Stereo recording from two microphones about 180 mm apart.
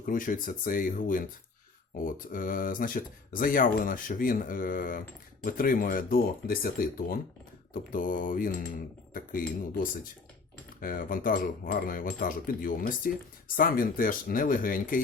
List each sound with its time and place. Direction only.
0.0 s speech: 50° left (ahead or behind)